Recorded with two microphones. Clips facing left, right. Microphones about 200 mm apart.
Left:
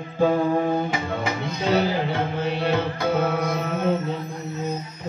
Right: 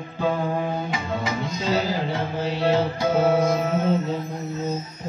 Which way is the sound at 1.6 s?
60° left (ahead or behind).